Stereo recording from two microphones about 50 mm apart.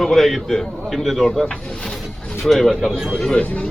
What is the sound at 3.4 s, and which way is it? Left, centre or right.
Speech, left.